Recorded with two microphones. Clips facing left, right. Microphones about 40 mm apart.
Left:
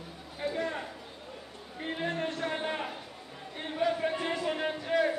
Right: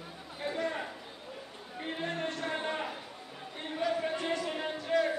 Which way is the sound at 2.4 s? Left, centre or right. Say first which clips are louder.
Left 2 dB; centre.